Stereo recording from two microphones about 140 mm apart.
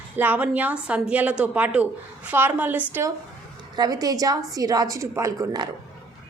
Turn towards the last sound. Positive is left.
turn(degrees=-25)  # may be behind; listen again after turning